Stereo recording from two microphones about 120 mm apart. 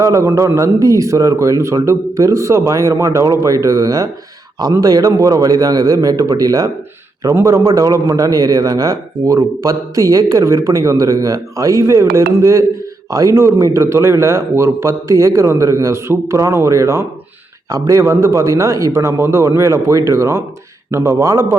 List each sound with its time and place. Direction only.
0.0 s a man's voice: 25° right (ahead or behind)